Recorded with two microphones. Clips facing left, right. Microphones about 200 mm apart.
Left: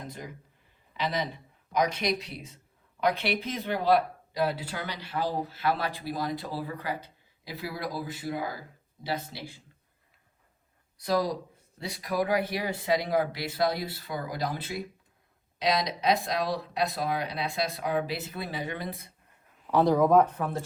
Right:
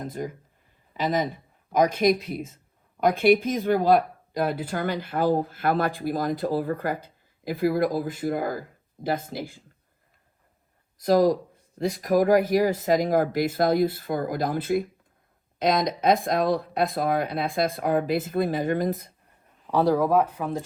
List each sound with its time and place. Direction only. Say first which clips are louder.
0.0 s speech: right 9 dB; 50° right (ahead or behind)
11.0 s speech: right 8 dB; 45° right (ahead or behind)
19.7 s speech: even; 10° right (ahead or behind)